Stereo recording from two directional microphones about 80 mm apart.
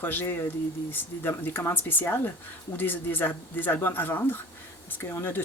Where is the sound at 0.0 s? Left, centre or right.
Left.